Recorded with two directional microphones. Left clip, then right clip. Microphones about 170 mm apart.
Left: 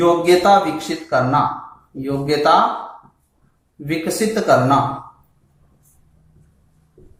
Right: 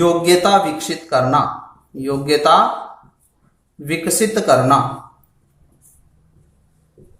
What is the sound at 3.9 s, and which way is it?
Music, 35° right (ahead or behind).